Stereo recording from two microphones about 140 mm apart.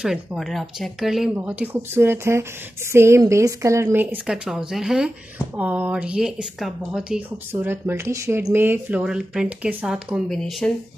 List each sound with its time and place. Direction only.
0.0 s a woman's voice: 5° right (ahead or behind)
4.5 s speech: centre (ahead or behind)